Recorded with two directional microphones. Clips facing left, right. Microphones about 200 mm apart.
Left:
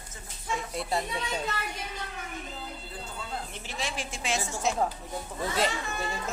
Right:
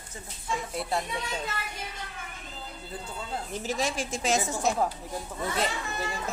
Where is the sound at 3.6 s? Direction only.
45° right (ahead or behind).